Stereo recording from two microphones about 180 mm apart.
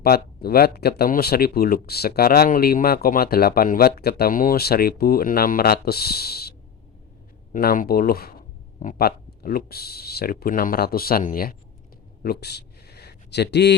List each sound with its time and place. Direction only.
0.0 s speech: 60° left (ahead or behind)
7.5 s speech: 50° left (ahead or behind)
12.2 s a sound: 60° left (ahead or behind)